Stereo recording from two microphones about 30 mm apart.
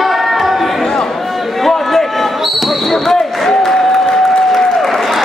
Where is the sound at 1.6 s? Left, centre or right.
Centre.